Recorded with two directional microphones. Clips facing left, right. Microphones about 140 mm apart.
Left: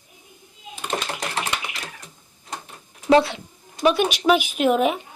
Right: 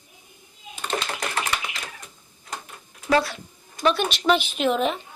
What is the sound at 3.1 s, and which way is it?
Speech, 25° left (ahead or behind).